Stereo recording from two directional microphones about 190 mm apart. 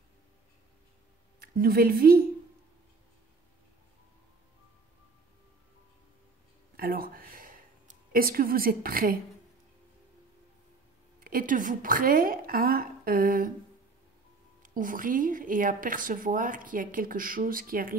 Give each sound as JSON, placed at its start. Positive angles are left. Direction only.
{"t": 1.4, "sound": "a woman's voice", "side_deg": -50}
{"t": 6.8, "sound": "a sound", "side_deg": -50}
{"t": 8.1, "sound": "a woman's voice", "side_deg": -50}
{"t": 11.1, "sound": "a woman's voice", "side_deg": -50}
{"t": 14.6, "sound": "a woman's voice", "side_deg": -45}